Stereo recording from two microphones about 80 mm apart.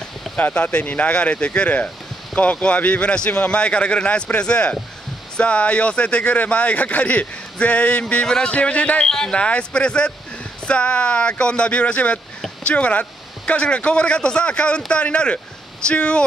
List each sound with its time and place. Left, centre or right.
0.4 s speech: centre